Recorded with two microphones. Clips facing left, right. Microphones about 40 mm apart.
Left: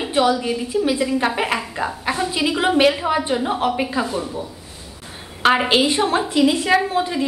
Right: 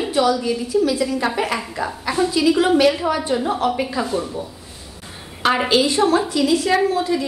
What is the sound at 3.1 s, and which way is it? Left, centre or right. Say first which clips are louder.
A woman's voice: even; left.